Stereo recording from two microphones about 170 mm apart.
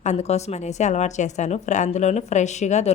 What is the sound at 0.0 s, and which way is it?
A woman's voice, 40° left (ahead or behind).